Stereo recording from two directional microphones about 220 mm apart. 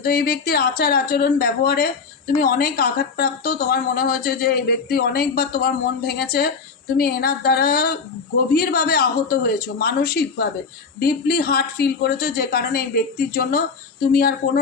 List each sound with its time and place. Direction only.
0.0 s speech: 45° left (ahead or behind)